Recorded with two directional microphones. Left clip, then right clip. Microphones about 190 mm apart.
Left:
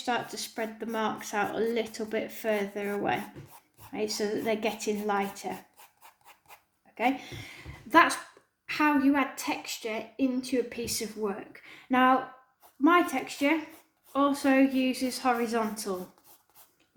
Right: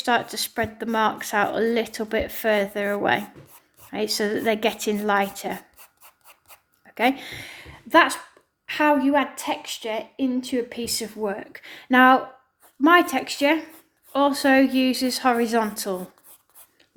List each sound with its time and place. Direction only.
0.0 s speech: 45° right (ahead or behind)
6.9 s a woman's voice: 45° right (ahead or behind)